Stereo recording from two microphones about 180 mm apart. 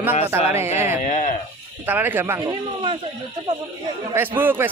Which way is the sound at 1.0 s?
45° left (ahead or behind).